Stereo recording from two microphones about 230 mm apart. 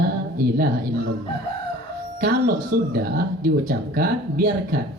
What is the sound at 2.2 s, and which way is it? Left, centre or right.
Speech, right.